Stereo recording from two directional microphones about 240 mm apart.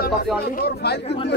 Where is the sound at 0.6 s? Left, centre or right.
Left.